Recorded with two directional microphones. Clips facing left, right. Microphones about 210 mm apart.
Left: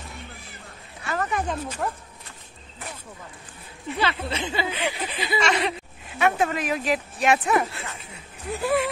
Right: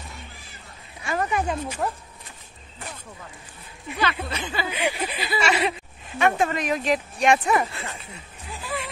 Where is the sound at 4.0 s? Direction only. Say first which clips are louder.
Even; 25° left (ahead or behind).